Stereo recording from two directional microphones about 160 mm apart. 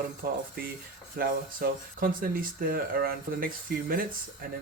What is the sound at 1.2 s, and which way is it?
Speech, 65° right (ahead or behind).